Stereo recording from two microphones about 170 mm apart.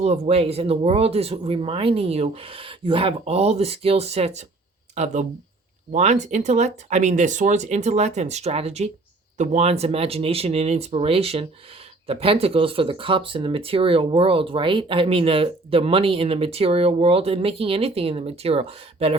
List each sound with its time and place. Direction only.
0.0 s speech: 35° right (ahead or behind)